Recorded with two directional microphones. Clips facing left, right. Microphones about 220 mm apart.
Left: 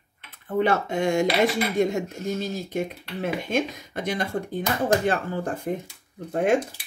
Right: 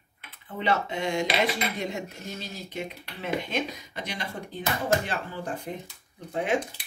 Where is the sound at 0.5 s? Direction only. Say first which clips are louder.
Left 6 dB; 50° left (ahead or behind).